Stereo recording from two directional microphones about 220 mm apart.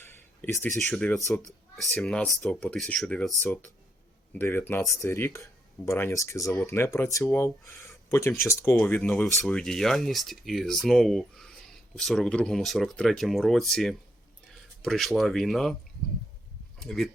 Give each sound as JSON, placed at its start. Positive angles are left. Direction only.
{"t": 0.1, "sound": "speech", "side_deg": 10}
{"t": 16.8, "sound": "speech", "side_deg": 0}